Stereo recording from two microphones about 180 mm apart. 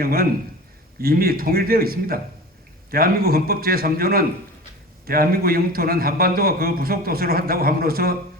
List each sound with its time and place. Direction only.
0.0 s a man's voice: 55° right (ahead or behind)